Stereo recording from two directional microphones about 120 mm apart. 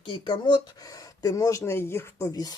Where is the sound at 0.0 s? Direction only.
40° left (ahead or behind).